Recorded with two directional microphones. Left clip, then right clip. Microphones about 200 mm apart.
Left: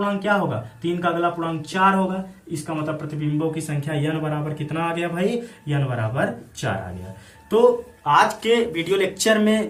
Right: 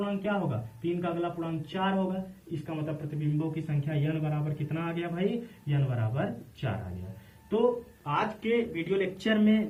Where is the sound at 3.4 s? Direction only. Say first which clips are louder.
Left 11 dB; 25° left (ahead or behind).